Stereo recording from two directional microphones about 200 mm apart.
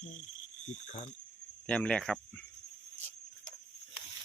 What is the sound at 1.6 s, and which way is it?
Speech, 5° left (ahead or behind).